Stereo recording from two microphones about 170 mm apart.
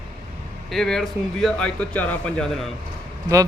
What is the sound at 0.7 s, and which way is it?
Speech, 5° left (ahead or behind).